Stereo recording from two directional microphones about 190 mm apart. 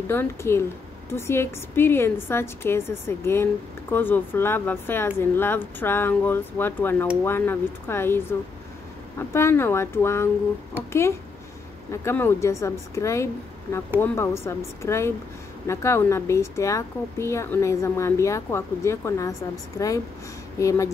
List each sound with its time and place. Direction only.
0.1 s speech: 15° left (ahead or behind)